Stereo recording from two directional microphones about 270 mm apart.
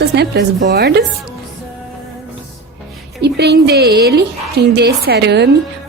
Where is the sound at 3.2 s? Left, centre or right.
Right.